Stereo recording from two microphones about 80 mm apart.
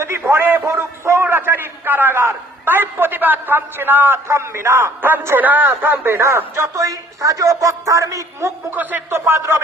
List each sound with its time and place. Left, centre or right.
0.0 s a man's voice: right
8.7 s speech: right